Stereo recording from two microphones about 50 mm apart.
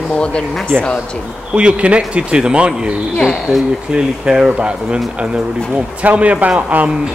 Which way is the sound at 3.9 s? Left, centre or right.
Centre.